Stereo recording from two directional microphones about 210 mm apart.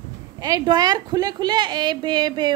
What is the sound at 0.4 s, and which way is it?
A woman's voice, 20° right (ahead or behind).